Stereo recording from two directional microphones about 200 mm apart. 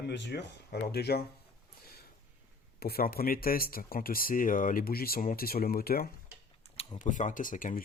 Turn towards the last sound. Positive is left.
turn(degrees=40)  # may be behind; listen again after turning